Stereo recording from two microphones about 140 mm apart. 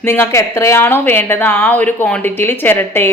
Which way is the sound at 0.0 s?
15° left (ahead or behind).